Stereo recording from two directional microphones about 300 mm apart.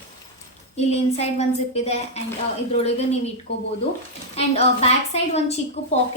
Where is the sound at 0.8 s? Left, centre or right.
Left.